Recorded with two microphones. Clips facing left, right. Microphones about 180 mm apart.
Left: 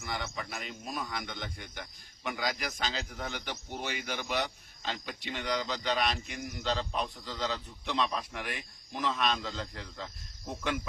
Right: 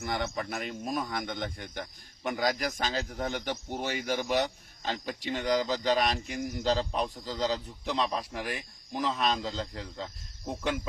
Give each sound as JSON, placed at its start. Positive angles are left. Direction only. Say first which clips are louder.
{"t": 0.0, "sound": "speech", "louder": "right 6 dB", "side_deg": -45}